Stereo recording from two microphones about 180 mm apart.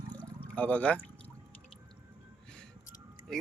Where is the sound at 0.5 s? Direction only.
10° left (ahead or behind).